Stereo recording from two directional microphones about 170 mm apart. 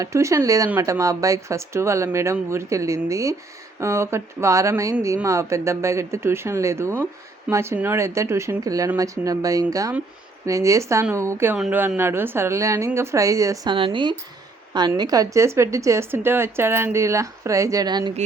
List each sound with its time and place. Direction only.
0.0 s a woman's voice: 15° right (ahead or behind)
13.7 s a woman's voice: 30° right (ahead or behind)